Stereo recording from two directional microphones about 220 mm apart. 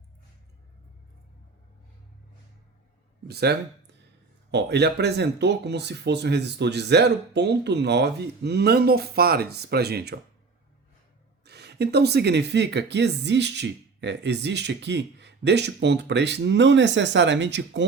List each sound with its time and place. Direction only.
3.2 s speech: 45° right (ahead or behind)
11.4 s speech: 50° right (ahead or behind)